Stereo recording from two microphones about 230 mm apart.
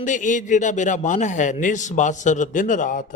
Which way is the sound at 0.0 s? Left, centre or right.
Left.